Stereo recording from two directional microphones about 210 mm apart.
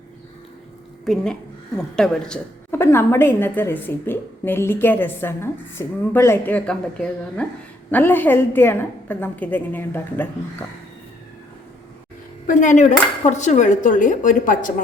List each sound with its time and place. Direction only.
1.0 s a woman's voice: centre (ahead or behind)
12.5 s a woman's voice: 35° left (ahead or behind)